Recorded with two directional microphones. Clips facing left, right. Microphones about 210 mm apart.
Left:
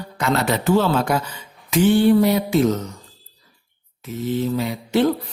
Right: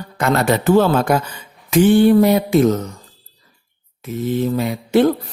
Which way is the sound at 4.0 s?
55° right (ahead or behind).